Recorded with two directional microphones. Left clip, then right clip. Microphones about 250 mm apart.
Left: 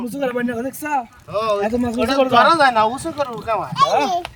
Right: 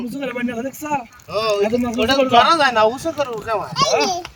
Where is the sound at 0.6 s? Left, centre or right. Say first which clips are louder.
Left 1 dB; centre.